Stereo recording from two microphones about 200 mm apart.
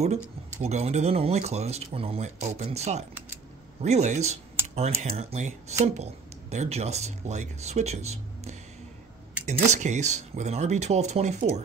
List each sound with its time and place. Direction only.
0.0 s speech: 35° right (ahead or behind)